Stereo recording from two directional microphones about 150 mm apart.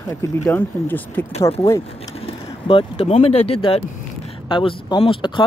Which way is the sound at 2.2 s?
40° left (ahead or behind).